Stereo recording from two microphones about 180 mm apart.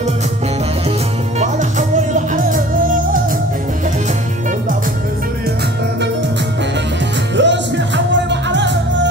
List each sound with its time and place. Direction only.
1.4 s music: 40° right (ahead or behind)
7.3 s music: 80° right